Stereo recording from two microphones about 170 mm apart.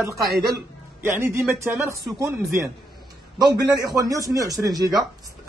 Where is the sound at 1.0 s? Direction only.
15° right (ahead or behind).